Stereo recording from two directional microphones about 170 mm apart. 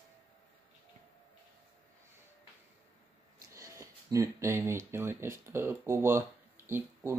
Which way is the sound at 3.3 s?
20° right (ahead or behind).